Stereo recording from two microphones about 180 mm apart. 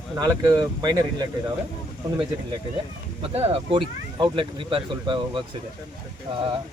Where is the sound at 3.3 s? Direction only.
35° right (ahead or behind).